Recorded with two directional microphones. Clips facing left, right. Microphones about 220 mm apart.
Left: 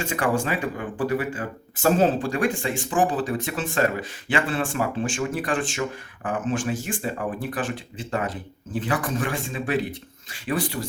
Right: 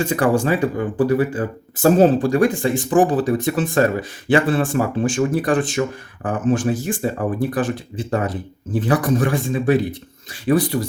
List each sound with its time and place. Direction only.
0.1 s speech: 35° right (ahead or behind)